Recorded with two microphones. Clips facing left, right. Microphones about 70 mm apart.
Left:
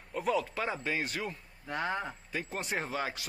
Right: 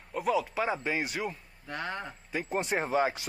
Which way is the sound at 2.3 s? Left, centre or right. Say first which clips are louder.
Right 7 dB; centre.